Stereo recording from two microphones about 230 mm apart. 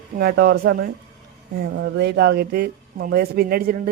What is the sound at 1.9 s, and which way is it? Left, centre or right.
Speech, right.